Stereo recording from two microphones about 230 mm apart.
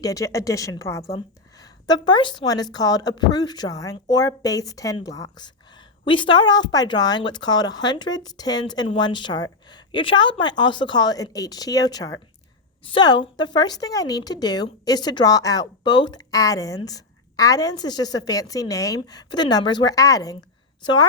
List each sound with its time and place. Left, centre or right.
0.0 s a woman's voice: centre